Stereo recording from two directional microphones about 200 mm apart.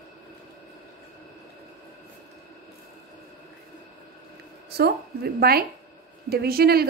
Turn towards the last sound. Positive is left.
turn(degrees=-50)  # may be behind; listen again after turning